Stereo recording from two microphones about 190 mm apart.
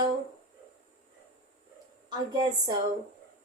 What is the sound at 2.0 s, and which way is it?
Speech, 25° right (ahead or behind).